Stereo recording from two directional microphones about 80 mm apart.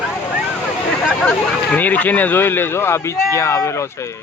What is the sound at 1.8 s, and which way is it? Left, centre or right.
Speech, left.